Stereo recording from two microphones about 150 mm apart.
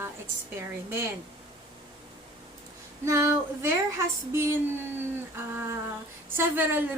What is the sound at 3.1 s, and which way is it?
Female singing, 20° right (ahead or behind).